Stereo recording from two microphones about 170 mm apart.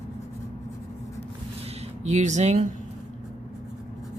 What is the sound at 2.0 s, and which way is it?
Speech, 45° right (ahead or behind).